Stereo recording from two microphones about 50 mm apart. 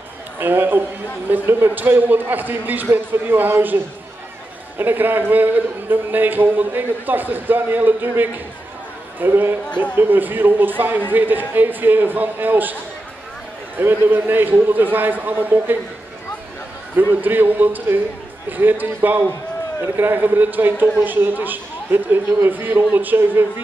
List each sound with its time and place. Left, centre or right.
0.4 s a man's voice: right
13.7 s a man's voice: right
16.9 s a man's voice: right